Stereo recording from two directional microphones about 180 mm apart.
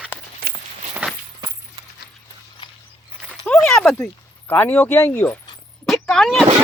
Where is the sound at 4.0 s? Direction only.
10° left (ahead or behind).